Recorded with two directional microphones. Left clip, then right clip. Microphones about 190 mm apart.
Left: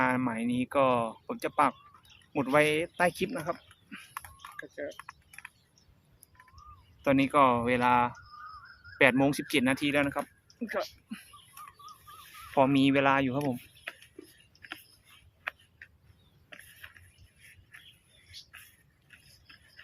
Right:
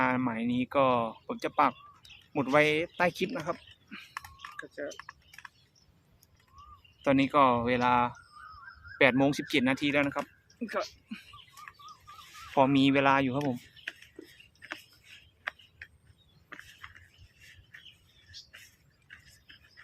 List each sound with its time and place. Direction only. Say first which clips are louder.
0.0 s speech: even; 5° left (ahead or behind)
3.3 s chewing: even; 5° left (ahead or behind)
4.9 s keys jangling: even; 10° left (ahead or behind)
7.0 s speech: even; 5° left (ahead or behind)
12.5 s speech: even; centre (ahead or behind)
15.4 s a sound: even; 20° left (ahead or behind)